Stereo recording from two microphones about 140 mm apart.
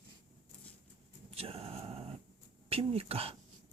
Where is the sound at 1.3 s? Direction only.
45° right (ahead or behind).